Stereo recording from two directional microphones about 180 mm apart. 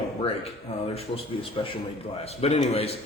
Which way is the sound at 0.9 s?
30° left (ahead or behind).